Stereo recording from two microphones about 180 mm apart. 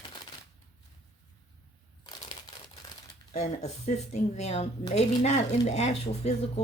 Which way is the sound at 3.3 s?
40° left (ahead or behind).